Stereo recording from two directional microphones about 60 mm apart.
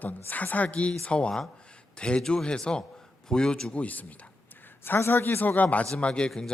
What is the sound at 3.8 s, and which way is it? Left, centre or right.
A man's voice, left.